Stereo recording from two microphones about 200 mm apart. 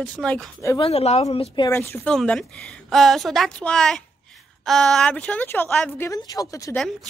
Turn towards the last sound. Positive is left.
turn(degrees=15)  # may be behind; listen again after turning